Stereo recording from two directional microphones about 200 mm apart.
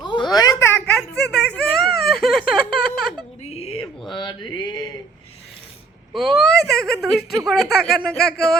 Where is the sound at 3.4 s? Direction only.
30° left (ahead or behind).